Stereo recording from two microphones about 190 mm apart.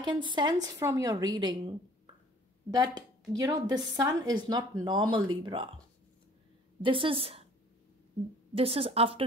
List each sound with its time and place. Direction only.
0.0 s speech: 25° right (ahead or behind)
6.8 s speech: 25° right (ahead or behind)
8.5 s a woman's voice: 30° right (ahead or behind)